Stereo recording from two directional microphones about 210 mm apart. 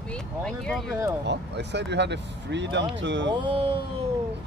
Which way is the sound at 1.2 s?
55° right (ahead or behind).